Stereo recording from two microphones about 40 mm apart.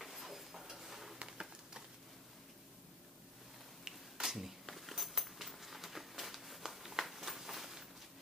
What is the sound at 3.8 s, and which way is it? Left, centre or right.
Finger snapping, centre.